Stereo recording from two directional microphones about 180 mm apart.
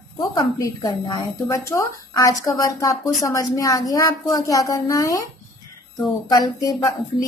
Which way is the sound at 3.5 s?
20° left (ahead or behind).